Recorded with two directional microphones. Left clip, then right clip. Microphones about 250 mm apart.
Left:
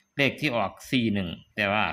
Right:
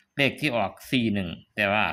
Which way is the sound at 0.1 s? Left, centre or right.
Centre.